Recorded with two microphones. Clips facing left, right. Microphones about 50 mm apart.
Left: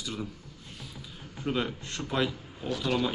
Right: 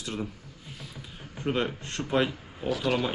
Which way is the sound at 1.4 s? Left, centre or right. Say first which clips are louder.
Right 2 dB; centre.